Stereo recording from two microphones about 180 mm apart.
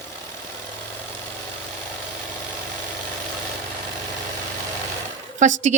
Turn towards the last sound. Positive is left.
turn(degrees=-40)  # may be behind; listen again after turning